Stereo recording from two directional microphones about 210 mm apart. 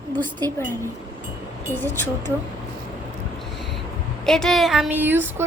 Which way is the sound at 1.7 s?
10° left (ahead or behind).